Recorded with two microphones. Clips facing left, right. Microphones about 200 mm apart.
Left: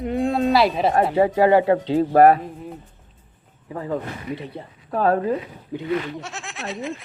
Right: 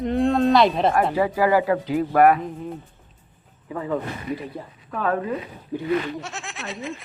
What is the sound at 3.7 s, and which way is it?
Speech, 30° left (ahead or behind).